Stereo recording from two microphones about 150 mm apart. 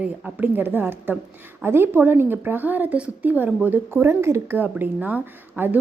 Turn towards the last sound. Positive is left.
turn(degrees=-10)  # may be behind; listen again after turning